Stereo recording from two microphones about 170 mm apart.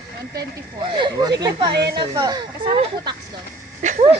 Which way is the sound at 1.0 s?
25° right (ahead or behind).